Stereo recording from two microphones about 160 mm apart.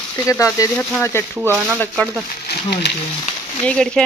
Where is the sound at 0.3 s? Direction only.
20° left (ahead or behind).